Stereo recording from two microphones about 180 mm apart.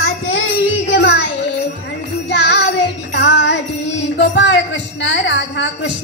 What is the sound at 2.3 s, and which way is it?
Music, 70° left (ahead or behind).